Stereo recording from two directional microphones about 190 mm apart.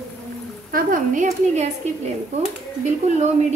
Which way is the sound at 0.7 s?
45° right (ahead or behind).